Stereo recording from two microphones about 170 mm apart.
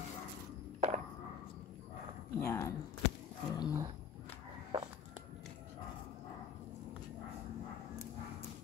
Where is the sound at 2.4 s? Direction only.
15° left (ahead or behind).